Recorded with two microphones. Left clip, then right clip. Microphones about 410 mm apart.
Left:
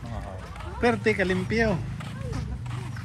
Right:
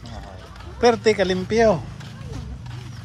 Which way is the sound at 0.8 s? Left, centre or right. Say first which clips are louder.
Right 6 dB; centre.